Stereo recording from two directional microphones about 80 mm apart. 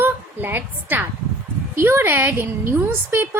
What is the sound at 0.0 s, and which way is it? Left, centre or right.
A woman's voice, right.